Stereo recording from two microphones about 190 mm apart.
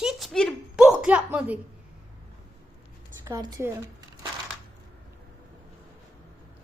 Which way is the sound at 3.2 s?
20° right (ahead or behind).